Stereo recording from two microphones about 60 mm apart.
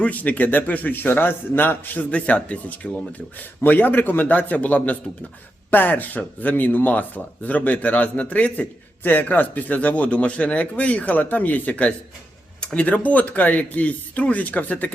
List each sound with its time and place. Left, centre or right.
0.0 s a man's voice: left
3.6 s a man's voice: left